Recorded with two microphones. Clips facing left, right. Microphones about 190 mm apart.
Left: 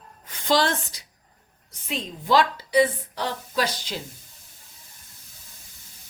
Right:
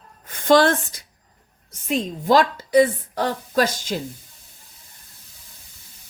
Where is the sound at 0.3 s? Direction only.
50° right (ahead or behind).